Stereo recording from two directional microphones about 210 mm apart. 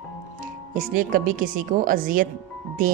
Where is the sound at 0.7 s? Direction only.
40° right (ahead or behind).